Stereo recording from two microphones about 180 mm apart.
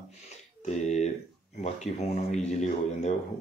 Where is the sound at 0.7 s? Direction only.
40° left (ahead or behind).